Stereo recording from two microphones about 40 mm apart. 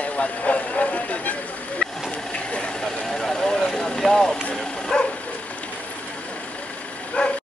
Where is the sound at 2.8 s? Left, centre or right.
Centre.